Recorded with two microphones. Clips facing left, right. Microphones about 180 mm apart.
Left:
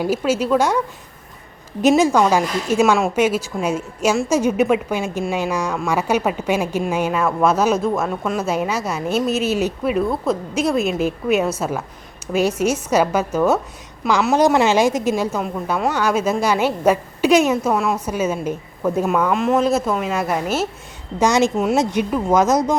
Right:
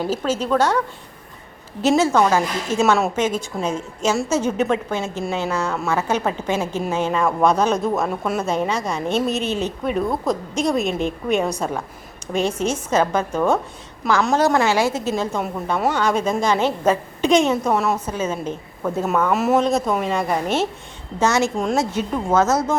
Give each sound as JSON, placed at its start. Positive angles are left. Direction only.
{"t": 0.0, "sound": "a woman's voice", "side_deg": 10}
{"t": 1.8, "sound": "a woman's voice", "side_deg": 15}
{"t": 8.4, "sound": "a woman's voice", "side_deg": 5}
{"t": 14.3, "sound": "a woman's voice", "side_deg": 15}
{"t": 21.2, "sound": "a woman's voice", "side_deg": 15}